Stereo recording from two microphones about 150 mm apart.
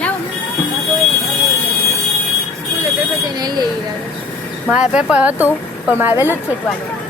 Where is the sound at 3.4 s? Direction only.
25° right (ahead or behind).